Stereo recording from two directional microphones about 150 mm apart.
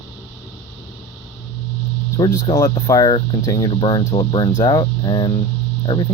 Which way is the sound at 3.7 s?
35° left (ahead or behind).